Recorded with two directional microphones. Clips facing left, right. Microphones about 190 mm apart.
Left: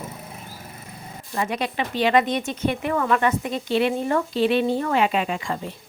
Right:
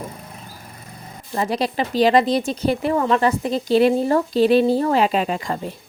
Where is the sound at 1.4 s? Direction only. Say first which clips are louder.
Right 4 dB; 35° right (ahead or behind).